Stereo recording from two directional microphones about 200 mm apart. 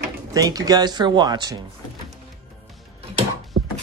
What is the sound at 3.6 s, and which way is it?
Dog, 90° right.